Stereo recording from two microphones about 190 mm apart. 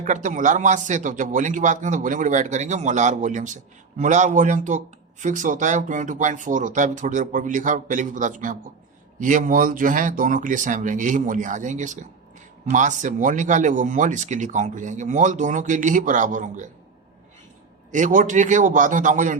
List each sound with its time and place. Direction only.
0.0 s speech: 40° right (ahead or behind)
17.9 s speech: 45° right (ahead or behind)